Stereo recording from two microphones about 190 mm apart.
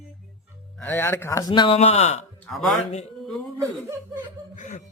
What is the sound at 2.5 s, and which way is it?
Speech, 5° left (ahead or behind).